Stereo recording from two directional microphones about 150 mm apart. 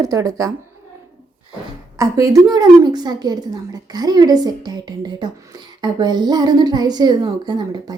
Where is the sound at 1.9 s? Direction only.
20° right (ahead or behind).